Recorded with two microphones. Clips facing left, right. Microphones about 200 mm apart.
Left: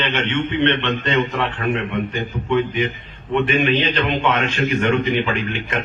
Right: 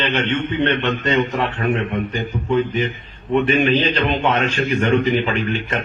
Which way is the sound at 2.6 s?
40° right (ahead or behind).